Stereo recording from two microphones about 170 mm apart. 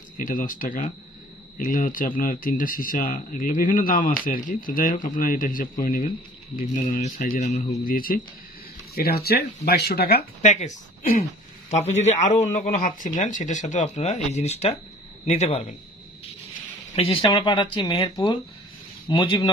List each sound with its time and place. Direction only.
0.2 s speech: 50° left (ahead or behind); by 10.2 s 70° left (ahead or behind)
10.4 s a man's voice: 45° left (ahead or behind)
16.9 s speech: 35° left (ahead or behind)